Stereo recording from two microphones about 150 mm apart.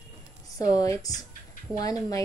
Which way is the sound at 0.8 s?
25° left (ahead or behind).